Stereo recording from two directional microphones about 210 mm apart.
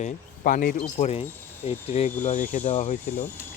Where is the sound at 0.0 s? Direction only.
40° left (ahead or behind).